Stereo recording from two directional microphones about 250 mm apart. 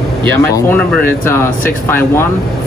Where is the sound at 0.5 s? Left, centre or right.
Centre.